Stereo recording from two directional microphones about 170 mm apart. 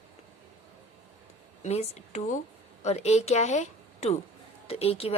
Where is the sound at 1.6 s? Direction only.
40° left (ahead or behind).